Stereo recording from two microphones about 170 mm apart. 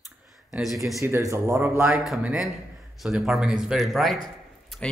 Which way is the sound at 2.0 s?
Centre (ahead or behind).